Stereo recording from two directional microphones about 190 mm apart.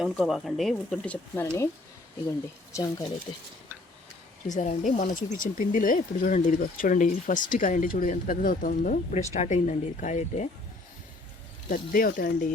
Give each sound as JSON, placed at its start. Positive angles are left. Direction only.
{"t": 0.0, "sound": "speech", "side_deg": 0}
{"t": 2.7, "sound": "speech", "side_deg": 20}
{"t": 4.5, "sound": "speech", "side_deg": 40}
{"t": 11.7, "sound": "speech", "side_deg": 45}